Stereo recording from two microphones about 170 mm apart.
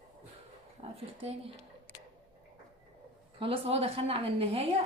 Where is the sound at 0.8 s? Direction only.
35° right (ahead or behind).